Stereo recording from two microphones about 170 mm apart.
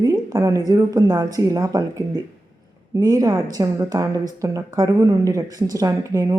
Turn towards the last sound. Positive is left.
turn(degrees=-20)  # may be behind; listen again after turning